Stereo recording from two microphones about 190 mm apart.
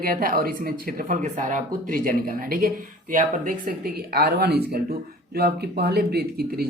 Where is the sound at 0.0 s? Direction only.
50° right (ahead or behind).